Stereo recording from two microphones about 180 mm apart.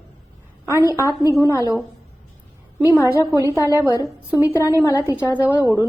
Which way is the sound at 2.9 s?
15° left (ahead or behind).